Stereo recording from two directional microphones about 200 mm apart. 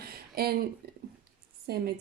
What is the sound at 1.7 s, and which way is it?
Speech, 50° right (ahead or behind).